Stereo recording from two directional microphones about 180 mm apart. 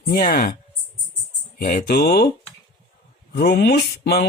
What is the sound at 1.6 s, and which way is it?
Mantra, 50° left (ahead or behind).